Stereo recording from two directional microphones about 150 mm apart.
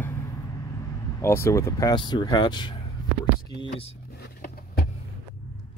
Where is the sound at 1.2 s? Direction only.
15° left (ahead or behind).